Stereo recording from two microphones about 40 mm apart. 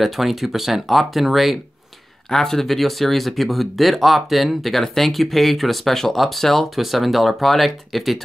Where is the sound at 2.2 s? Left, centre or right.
Centre.